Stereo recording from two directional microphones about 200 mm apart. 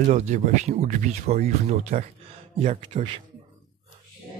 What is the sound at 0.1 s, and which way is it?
Speech, 35° right (ahead or behind).